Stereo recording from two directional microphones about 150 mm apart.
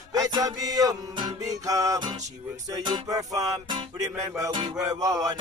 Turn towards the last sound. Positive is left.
turn(degrees=-25)  # may be behind; listen again after turning